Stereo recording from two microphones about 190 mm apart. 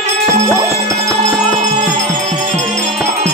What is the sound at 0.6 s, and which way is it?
Music, 15° right (ahead or behind).